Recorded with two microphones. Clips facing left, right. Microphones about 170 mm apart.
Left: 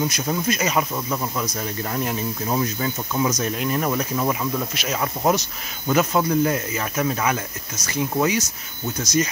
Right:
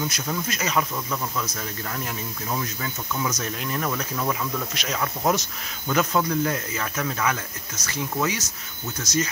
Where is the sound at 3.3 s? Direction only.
15° left (ahead or behind).